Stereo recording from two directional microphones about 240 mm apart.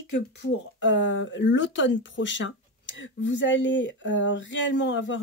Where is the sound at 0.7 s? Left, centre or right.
Left.